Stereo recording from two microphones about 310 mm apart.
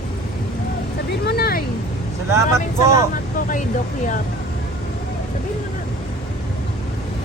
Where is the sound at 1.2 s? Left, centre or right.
Left.